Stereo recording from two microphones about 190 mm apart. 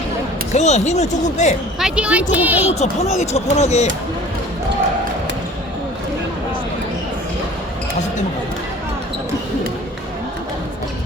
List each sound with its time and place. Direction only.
0.5 s speech: 35° left (ahead or behind)
1.8 s speech: 5° right (ahead or behind)
2.7 s speech: 35° left (ahead or behind)